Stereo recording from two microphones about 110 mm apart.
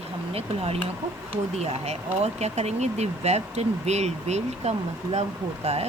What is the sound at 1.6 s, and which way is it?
Speech, 80° right.